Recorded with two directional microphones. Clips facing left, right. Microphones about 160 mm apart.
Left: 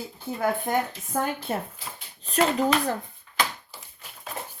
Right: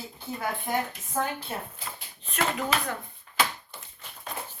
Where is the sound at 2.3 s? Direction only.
35° left (ahead or behind).